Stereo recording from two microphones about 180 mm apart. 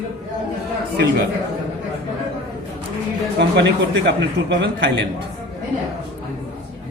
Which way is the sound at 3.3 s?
70° right (ahead or behind).